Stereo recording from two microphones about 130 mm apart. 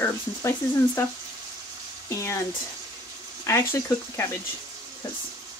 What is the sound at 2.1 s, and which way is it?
Speech, 20° left (ahead or behind).